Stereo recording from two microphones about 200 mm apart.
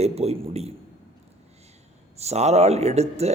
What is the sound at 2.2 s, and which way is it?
A man's voice, 30° right (ahead or behind).